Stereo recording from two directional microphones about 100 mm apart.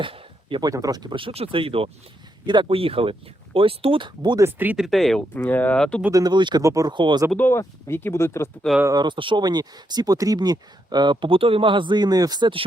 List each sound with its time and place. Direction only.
0.0 s a sound: 55° right (ahead or behind)
0.6 s speech: 35° right (ahead or behind)
1.1 s speech: 70° right (ahead or behind); by 4.4 s 50° right (ahead or behind)
4.4 s speech: 20° right (ahead or behind)
4.8 s speech: centre (ahead or behind)
5.3 s speech: 20° left (ahead or behind)
6.1 s speech: 40° right (ahead or behind)
6.6 s speech: 30° right (ahead or behind)
6.9 s speech: 50° right (ahead or behind)
7.3 s speech: 20° left (ahead or behind)
8.9 s speech: 45° right (ahead or behind)
9.1 s speech: 55° right (ahead or behind)